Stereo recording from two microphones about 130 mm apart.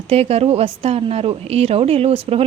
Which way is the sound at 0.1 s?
55° right (ahead or behind).